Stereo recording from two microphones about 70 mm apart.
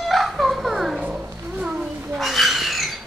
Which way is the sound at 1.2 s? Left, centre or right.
Centre.